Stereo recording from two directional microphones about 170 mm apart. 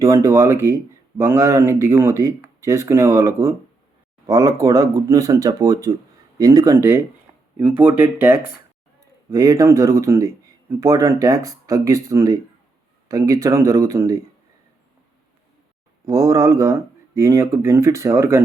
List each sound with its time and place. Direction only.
0.0 s speech: 15° right (ahead or behind)
7.3 s a sound: 10° right (ahead or behind)
7.8 s speech: 15° right (ahead or behind)
16.0 s speech: 20° right (ahead or behind)